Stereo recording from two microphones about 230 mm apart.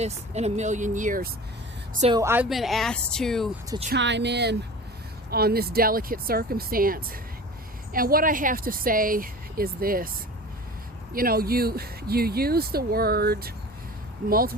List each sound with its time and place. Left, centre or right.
0.0 s speech: right
2.1 s speech: centre
3.9 s speech: right
11.1 s speech: right